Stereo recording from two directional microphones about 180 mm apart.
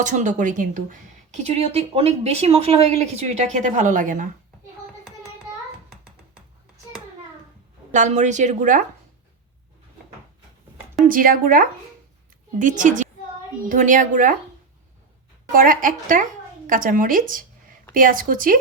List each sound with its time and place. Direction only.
0.0 s speech: 45° right (ahead or behind)
5.9 s cat: 5° right (ahead or behind)
7.9 s speech: 40° right (ahead or behind)
11.1 s speech: 50° right (ahead or behind)
15.5 s speech: 50° right (ahead or behind)